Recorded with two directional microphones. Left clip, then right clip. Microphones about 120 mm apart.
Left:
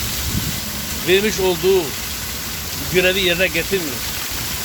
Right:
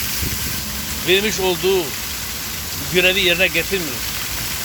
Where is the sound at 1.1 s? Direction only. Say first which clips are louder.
Left 1 dB; 15° left (ahead or behind).